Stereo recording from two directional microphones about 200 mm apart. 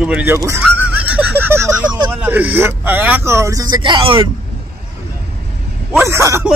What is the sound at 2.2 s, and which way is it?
Speech, 5° right (ahead or behind).